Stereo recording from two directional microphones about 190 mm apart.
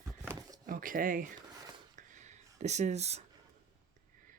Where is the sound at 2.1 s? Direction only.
40° right (ahead or behind).